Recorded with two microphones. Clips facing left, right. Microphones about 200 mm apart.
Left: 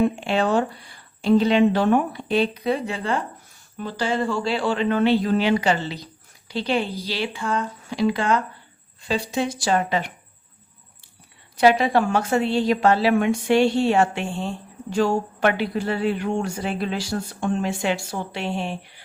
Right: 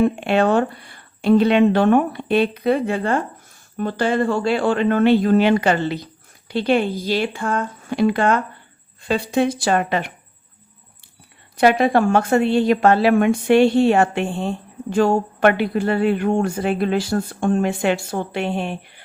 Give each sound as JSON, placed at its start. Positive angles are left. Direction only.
{"t": 0.0, "sound": "a woman's voice", "side_deg": -60}
{"t": 11.5, "sound": "a woman's voice", "side_deg": -55}